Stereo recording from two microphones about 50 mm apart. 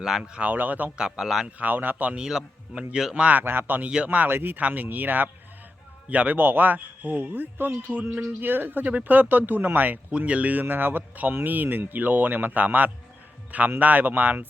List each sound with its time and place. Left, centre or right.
0.0 s speech: centre
0.3 s speech: right
0.9 s speech: centre
1.5 s speech: right
2.1 s speech: centre
3.3 s speech: right
3.8 s speech: right
4.3 s speech: right
4.6 s speech: right
10.1 s speech: right